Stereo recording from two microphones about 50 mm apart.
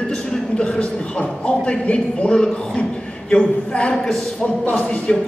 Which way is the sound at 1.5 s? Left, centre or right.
Left.